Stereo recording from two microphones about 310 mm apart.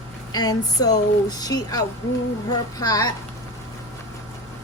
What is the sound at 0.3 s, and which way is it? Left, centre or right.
Speech, centre.